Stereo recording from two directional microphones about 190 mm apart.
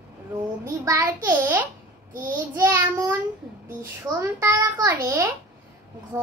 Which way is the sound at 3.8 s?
15° right (ahead or behind).